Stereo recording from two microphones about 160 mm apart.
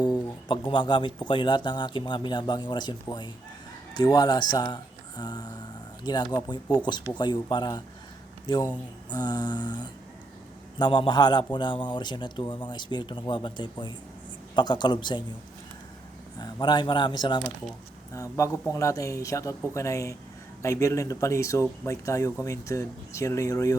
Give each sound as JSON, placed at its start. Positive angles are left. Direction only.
{"t": 0.0, "sound": "speech", "side_deg": 30}
{"t": 16.4, "sound": "speech", "side_deg": 25}